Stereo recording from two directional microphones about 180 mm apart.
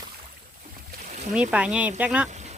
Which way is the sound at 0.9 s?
45° right (ahead or behind).